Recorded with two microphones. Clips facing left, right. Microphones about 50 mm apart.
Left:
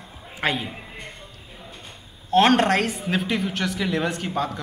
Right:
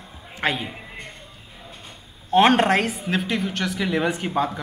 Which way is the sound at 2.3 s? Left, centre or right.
Centre.